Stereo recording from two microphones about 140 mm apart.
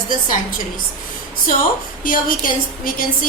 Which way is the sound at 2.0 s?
75° left (ahead or behind).